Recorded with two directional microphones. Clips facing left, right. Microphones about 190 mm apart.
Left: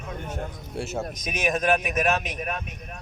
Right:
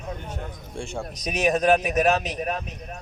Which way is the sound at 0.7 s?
5° left (ahead or behind).